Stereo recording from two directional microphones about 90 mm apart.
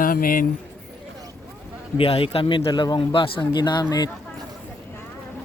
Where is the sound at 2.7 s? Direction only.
55° left (ahead or behind).